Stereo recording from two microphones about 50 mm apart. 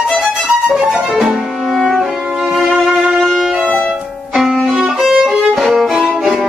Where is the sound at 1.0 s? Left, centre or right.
Centre.